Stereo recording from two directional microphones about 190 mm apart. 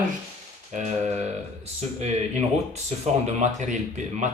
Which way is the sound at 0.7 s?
40° right (ahead or behind).